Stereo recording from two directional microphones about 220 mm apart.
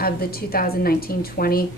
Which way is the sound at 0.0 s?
45° left (ahead or behind).